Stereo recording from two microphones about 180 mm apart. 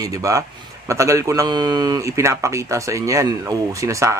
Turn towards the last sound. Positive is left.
turn(degrees=-15)  # may be behind; listen again after turning